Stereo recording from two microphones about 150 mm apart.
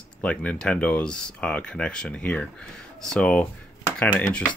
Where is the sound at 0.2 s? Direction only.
10° left (ahead or behind).